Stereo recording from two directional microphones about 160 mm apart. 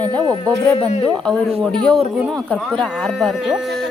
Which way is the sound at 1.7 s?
5° left (ahead or behind).